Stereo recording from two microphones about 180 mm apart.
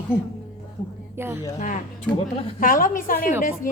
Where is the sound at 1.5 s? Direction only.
45° left (ahead or behind).